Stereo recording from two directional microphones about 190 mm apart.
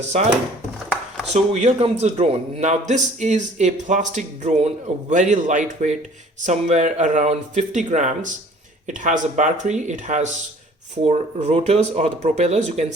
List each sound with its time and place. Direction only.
1.3 s a man's voice: 35° right (ahead or behind)